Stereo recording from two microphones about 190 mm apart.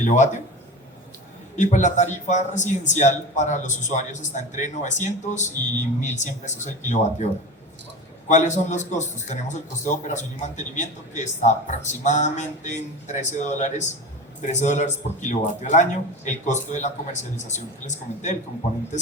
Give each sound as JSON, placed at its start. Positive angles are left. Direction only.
{"t": 0.0, "sound": "speech", "side_deg": 40}
{"t": 1.5, "sound": "speech", "side_deg": 40}
{"t": 8.3, "sound": "speech", "side_deg": 40}